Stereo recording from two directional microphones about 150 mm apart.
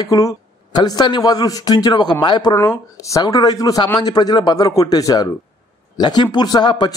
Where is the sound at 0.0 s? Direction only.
25° left (ahead or behind).